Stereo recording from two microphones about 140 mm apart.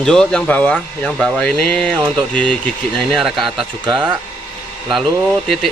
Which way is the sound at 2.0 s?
30° right (ahead or behind).